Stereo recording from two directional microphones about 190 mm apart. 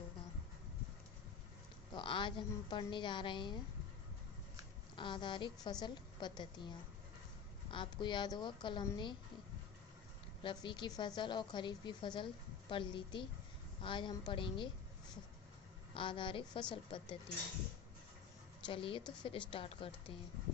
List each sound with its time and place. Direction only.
1.9 s a woman's voice: 25° left (ahead or behind)
4.9 s a woman's voice: 25° left (ahead or behind)
10.4 s a woman's voice: 25° left (ahead or behind)
16.0 s a woman's voice: 25° left (ahead or behind)
18.6 s a woman's voice: 25° left (ahead or behind)